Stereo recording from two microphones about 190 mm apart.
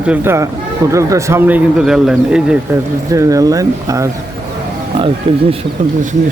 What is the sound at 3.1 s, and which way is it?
Speech, 15° right (ahead or behind).